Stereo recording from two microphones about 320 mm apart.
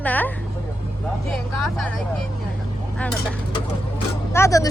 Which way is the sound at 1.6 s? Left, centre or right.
Centre.